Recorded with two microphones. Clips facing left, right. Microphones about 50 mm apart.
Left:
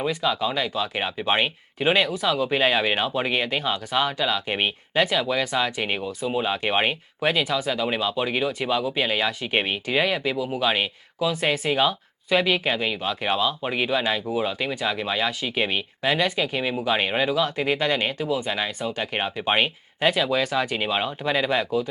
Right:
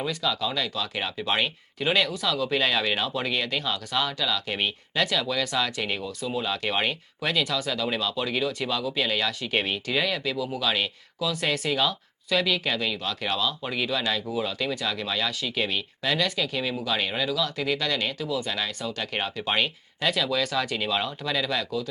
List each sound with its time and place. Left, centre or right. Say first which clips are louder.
0.0 s speech: left 4 dB; left